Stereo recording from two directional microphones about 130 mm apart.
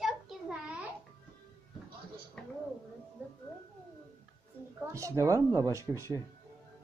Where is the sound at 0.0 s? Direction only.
5° right (ahead or behind).